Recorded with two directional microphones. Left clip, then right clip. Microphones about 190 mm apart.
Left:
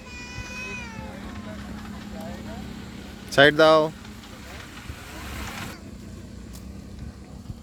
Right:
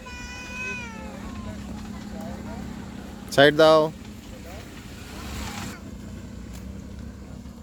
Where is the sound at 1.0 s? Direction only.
20° right (ahead or behind).